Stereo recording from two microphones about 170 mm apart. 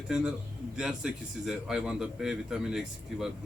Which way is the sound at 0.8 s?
5° right (ahead or behind).